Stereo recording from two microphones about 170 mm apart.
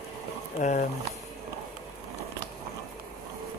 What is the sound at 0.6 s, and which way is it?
Speech, 45° left (ahead or behind).